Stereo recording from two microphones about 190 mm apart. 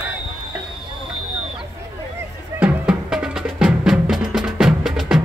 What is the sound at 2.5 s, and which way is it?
Music, 5° right (ahead or behind).